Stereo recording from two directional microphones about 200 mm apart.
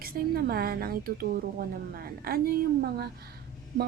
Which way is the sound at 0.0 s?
50° right (ahead or behind).